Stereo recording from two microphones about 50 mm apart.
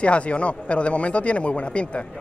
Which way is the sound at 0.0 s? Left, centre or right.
Left.